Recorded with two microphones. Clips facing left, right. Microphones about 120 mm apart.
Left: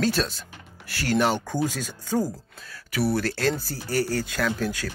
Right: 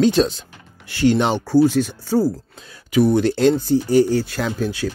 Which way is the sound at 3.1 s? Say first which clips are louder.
Right 9 dB; 25° right (ahead or behind).